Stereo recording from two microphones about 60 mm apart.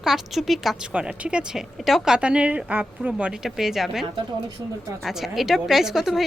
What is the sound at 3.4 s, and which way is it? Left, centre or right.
Speech, centre.